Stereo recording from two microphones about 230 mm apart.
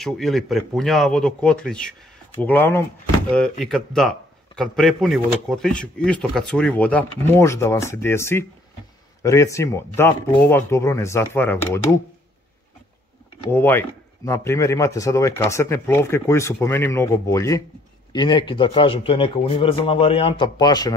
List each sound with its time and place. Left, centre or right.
0.0 s speech: centre
13.5 s a man's voice: centre